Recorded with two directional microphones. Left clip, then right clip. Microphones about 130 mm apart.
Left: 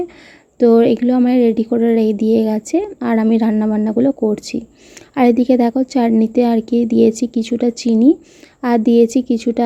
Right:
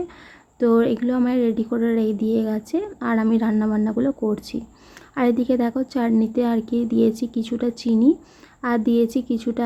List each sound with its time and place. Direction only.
0.6 s a woman's voice: 35° left (ahead or behind)